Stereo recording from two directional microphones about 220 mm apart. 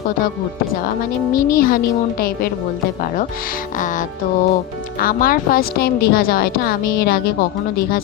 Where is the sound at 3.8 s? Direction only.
35° left (ahead or behind).